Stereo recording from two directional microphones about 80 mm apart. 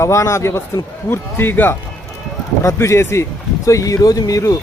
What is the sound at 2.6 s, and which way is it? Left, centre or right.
Speech, left.